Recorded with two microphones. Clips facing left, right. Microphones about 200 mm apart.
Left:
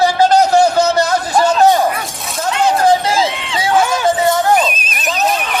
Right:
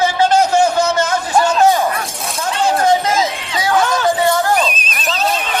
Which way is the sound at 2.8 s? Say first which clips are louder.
Left 2 dB; 30° left (ahead or behind).